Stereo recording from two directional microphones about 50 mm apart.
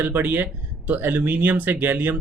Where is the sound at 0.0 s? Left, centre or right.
Right.